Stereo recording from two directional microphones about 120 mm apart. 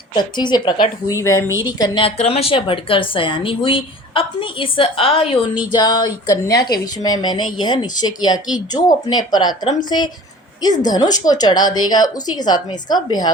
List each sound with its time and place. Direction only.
0.1 s a woman's voice: 40° left (ahead or behind)
1.6 s a woman's voice: 40° left (ahead or behind)
2.1 s a woman's voice: 55° left (ahead or behind); by 13.3 s 35° left (ahead or behind)